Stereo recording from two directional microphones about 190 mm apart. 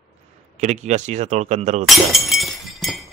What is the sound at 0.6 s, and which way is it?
Speech, 35° right (ahead or behind).